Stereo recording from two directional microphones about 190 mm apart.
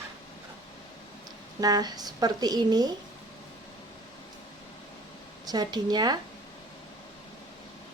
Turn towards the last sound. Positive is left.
turn(degrees=-20)  # may be behind; listen again after turning